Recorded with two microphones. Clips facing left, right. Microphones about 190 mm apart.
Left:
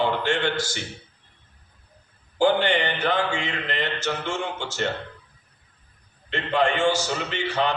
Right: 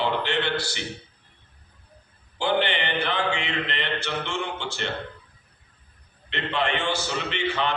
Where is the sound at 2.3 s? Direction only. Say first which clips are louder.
Left 4 dB; 45° left (ahead or behind).